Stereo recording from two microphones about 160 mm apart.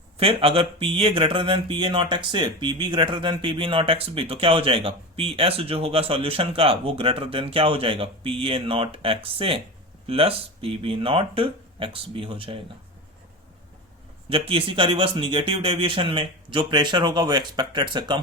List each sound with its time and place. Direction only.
0.2 s speech: 35° right (ahead or behind)
14.3 s speech: 35° right (ahead or behind)